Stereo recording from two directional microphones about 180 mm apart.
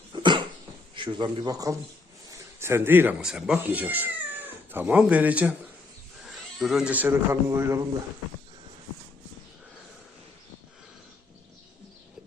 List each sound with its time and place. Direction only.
0.1 s cough: 25° right (ahead or behind)
0.9 s a man's voice: 25° right (ahead or behind)